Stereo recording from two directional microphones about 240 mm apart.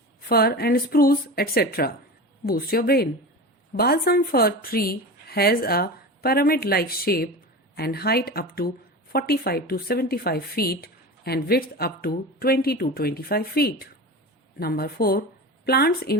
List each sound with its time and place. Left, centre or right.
0.3 s a woman's voice: left